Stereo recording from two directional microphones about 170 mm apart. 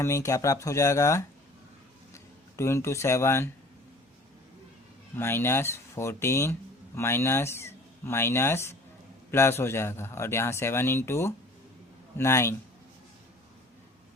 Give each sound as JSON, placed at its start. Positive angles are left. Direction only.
{"t": 0.0, "sound": "speech", "side_deg": 20}
{"t": 5.1, "sound": "speech", "side_deg": 15}